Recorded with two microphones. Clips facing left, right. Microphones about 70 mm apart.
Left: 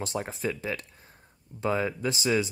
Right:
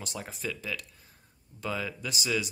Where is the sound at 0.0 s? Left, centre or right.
Left.